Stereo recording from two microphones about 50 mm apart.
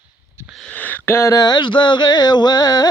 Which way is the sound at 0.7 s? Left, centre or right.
Left.